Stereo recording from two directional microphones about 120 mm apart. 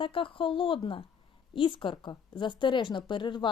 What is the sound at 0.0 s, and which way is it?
A woman's voice, 45° left (ahead or behind).